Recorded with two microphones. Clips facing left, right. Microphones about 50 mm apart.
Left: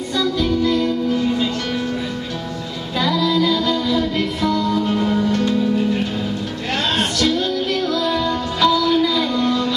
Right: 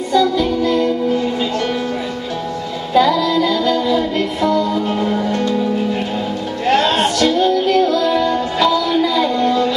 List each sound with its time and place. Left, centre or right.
0.1 s music: centre
2.9 s music: centre
6.7 s music: right
7.2 s music: centre